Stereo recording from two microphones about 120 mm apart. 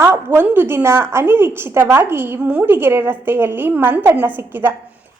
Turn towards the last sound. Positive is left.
turn(degrees=-15)  # may be behind; listen again after turning